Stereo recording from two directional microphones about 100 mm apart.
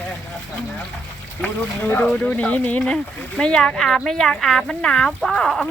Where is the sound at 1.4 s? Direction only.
15° left (ahead or behind).